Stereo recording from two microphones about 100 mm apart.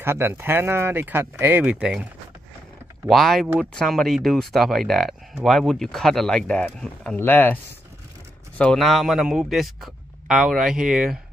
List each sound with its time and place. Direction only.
0.0 s speech: 25° right (ahead or behind)
1.6 s speech: 10° right (ahead or behind)
3.1 s speech: centre (ahead or behind)
7.2 s speech: 20° left (ahead or behind)
8.7 s speech: centre (ahead or behind)